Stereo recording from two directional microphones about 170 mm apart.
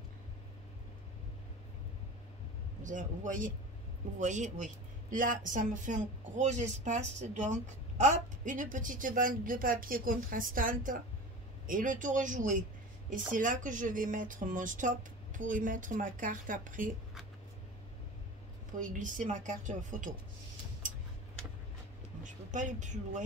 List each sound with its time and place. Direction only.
2.8 s speech: 50° right (ahead or behind)
18.8 s speech: 50° right (ahead or behind)
22.2 s speech: 50° right (ahead or behind)